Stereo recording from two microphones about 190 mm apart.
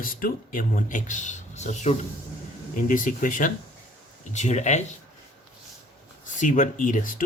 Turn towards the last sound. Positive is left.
turn(degrees=45)  # may be behind; listen again after turning